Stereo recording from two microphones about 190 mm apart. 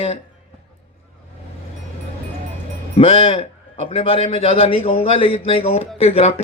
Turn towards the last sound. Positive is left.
turn(degrees=30)  # may be behind; listen again after turning